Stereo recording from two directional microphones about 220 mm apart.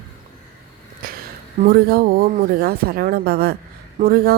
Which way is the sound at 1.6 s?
45° right (ahead or behind).